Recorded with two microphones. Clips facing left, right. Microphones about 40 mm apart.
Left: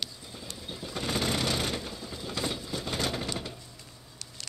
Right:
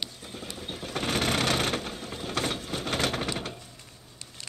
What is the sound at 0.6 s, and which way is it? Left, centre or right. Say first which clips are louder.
Sewing machine: right 3 dB; right.